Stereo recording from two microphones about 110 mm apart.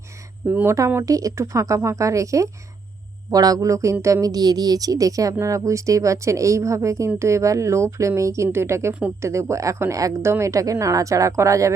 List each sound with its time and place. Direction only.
0.4 s a woman's voice: 20° right (ahead or behind)